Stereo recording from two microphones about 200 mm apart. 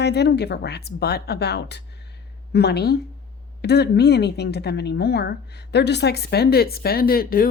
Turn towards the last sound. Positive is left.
turn(degrees=45)  # may be behind; listen again after turning